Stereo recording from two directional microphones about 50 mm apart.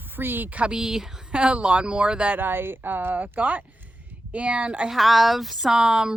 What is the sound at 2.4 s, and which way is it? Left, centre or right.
Speech, right.